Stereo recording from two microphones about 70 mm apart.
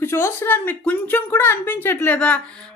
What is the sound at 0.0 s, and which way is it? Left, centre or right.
Speech, left.